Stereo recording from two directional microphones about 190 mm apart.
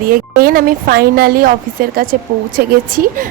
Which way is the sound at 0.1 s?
50° right (ahead or behind).